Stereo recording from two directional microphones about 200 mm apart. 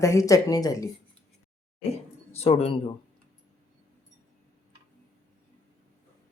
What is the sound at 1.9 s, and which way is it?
Speech, 30° left (ahead or behind).